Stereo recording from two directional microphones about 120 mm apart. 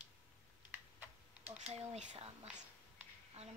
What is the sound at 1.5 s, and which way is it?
Speech, 65° right (ahead or behind).